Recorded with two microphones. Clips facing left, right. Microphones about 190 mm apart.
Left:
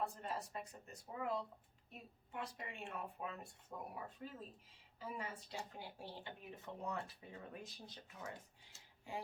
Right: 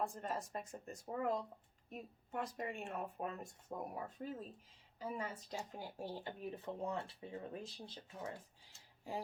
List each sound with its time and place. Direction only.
0.0 s speech: 45° right (ahead or behind); by 8.3 s 30° right (ahead or behind)